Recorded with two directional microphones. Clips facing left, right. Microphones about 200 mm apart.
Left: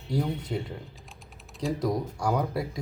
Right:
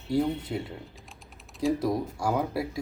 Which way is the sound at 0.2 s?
5° right (ahead or behind).